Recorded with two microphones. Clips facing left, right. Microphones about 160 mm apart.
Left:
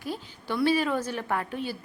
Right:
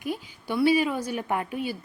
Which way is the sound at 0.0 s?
15° right (ahead or behind).